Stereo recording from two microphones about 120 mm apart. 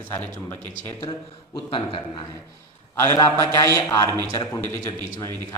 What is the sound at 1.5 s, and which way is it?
Speech, 45° left (ahead or behind).